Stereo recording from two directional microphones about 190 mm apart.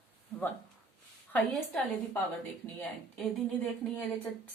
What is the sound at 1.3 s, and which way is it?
Speech, 10° left (ahead or behind).